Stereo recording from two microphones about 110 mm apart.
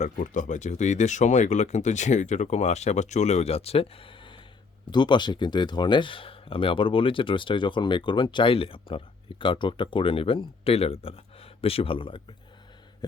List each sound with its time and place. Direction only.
0.5 s speech: 90° left; by 12.2 s 55° left (ahead or behind)